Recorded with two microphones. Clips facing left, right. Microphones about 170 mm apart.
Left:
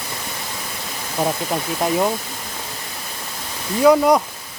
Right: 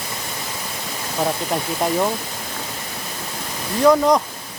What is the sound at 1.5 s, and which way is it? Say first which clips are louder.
Speech: even; centre (ahead or behind).